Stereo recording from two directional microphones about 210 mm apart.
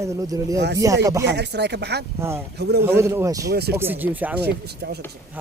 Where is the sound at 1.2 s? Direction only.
55° right (ahead or behind).